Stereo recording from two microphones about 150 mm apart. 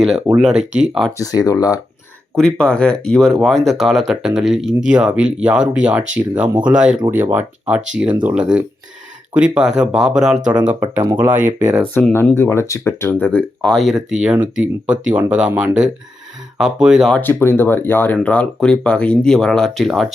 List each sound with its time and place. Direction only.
0.3 s speech: 5° right (ahead or behind)
1.2 s speech: 25° left (ahead or behind)
2.4 s speech: 5° left (ahead or behind)
11.3 s speech: 60° right (ahead or behind)
12.1 s speech: 15° left (ahead or behind); by 17.2 s 5° right (ahead or behind)
17.2 s speech: 15° left (ahead or behind)